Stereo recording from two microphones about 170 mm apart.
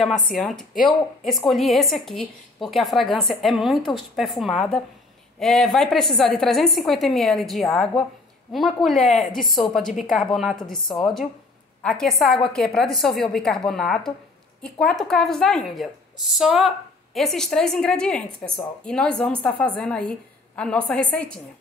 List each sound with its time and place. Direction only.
0.3 s a woman's voice: centre (ahead or behind)
10.8 s a woman's voice: 25° left (ahead or behind)
11.8 s a woman's voice: 5° left (ahead or behind)